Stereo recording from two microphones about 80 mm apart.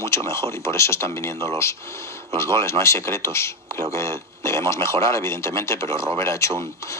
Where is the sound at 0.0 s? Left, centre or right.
Left.